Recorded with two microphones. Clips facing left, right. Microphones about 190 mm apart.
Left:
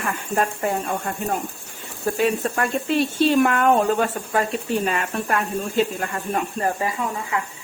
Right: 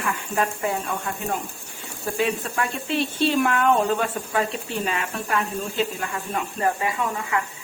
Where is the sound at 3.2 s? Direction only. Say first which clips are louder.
Left 3 dB; 50° left (ahead or behind).